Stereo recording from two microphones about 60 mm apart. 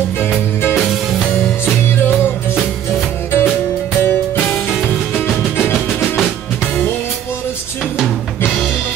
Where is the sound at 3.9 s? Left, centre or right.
Left.